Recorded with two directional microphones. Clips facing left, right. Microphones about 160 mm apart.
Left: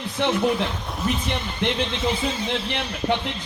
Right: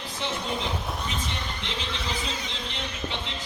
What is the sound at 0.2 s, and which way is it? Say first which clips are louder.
A man's voice: left 10 dB; 65° left (ahead or behind).